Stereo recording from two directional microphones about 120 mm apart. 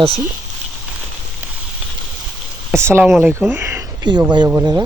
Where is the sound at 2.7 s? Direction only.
20° right (ahead or behind).